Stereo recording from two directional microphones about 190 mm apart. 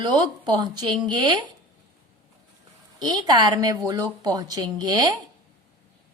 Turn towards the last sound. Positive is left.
turn(degrees=-20)  # may be behind; listen again after turning